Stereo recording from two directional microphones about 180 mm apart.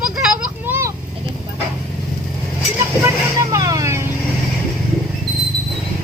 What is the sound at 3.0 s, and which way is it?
Speech, 15° right (ahead or behind).